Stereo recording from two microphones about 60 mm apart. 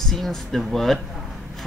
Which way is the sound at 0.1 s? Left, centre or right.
Centre.